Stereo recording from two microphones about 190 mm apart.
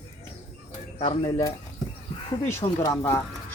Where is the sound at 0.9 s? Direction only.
30° left (ahead or behind).